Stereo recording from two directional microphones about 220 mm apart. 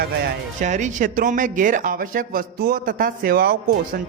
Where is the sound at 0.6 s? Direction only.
35° right (ahead or behind).